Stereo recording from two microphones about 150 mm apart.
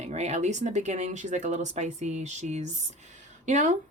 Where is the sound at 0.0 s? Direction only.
50° right (ahead or behind).